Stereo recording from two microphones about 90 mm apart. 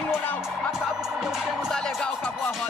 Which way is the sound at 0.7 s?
5° right (ahead or behind).